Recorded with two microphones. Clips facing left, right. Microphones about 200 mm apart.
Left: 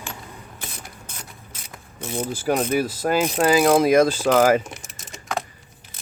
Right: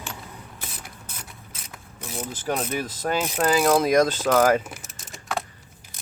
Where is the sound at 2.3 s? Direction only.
10° left (ahead or behind).